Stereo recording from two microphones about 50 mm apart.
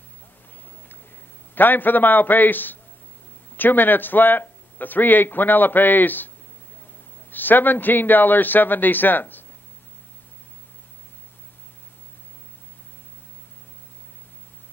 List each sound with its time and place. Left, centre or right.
1.5 s speech: left